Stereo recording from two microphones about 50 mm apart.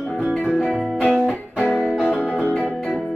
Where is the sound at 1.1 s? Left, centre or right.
Centre.